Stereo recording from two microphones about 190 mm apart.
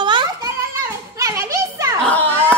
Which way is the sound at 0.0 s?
25° right (ahead or behind).